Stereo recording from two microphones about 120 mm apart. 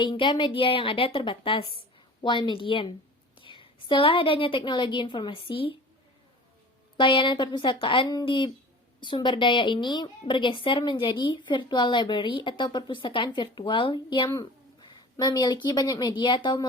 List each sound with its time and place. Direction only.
0.0 s a woman's voice: 40° left (ahead or behind)
6.9 s a woman's voice: 40° left (ahead or behind)
15.1 s a woman's voice: 35° left (ahead or behind)